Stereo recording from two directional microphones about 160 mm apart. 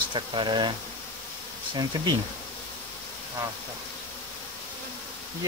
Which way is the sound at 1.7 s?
25° right (ahead or behind).